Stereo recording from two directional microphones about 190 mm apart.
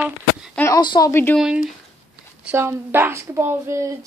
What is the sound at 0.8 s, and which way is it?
Speech, 20° left (ahead or behind).